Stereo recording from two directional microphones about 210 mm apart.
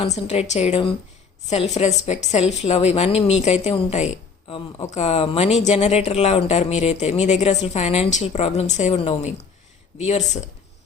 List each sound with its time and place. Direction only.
0.0 s a woman's voice: 30° left (ahead or behind)